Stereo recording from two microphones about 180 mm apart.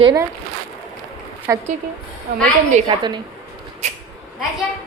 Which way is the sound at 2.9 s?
30° right (ahead or behind).